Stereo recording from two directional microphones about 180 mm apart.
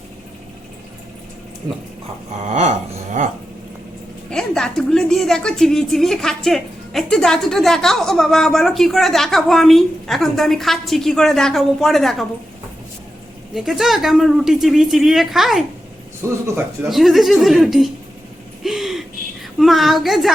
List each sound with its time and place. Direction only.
2.4 s speech: 40° right (ahead or behind)
4.3 s a woman's voice: 5° left (ahead or behind)
13.5 s a woman's voice: centre (ahead or behind)
16.2 s speech: 15° right (ahead or behind)
16.9 s a woman's voice: centre (ahead or behind)
18.6 s gasp: centre (ahead or behind)
19.5 s a woman's voice: centre (ahead or behind)